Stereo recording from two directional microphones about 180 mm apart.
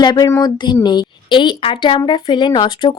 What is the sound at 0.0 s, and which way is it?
Speech, 20° left (ahead or behind).